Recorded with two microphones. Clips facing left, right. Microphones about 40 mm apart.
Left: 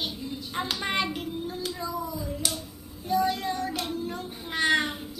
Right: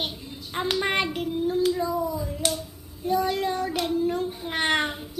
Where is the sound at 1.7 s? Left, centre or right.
Right.